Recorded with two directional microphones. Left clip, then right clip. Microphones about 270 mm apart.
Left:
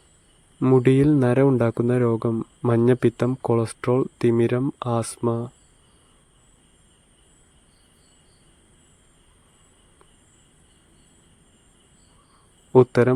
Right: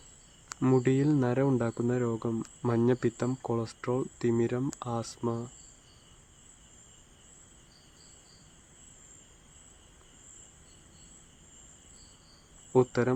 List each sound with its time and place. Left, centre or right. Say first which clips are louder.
0.6 s speech: left 9 dB; left
12.7 s speech: left 10 dB; left